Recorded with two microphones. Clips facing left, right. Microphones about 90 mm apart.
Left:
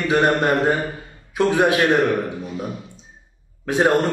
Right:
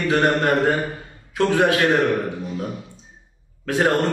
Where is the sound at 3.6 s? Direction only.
20° left (ahead or behind).